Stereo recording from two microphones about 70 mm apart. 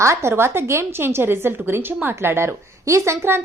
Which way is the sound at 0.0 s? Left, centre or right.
Right.